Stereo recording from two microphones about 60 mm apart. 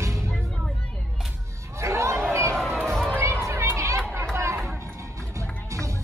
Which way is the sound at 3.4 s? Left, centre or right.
Right.